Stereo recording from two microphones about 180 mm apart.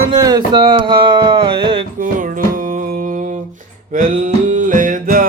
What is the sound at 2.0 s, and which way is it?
Music, 50° right (ahead or behind).